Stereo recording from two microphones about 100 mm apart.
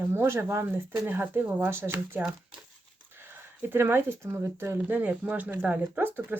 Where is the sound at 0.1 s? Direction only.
25° right (ahead or behind).